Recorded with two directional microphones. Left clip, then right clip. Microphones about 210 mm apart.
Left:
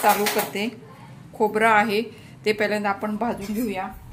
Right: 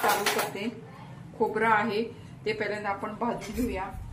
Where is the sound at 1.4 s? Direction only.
50° left (ahead or behind).